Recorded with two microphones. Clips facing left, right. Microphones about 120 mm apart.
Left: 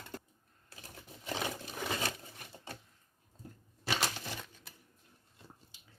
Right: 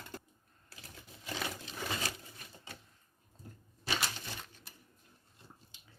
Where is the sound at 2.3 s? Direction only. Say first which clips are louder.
Left 4 dB; 55° left (ahead or behind).